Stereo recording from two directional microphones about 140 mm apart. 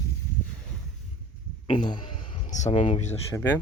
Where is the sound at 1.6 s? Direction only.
35° left (ahead or behind).